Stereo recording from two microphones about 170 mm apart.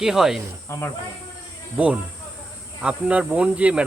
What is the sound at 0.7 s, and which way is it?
Speech, 15° left (ahead or behind).